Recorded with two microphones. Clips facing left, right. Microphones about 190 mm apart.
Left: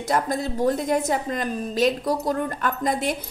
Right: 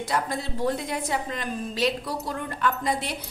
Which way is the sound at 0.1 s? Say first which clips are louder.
Left 6 dB; 45° left (ahead or behind).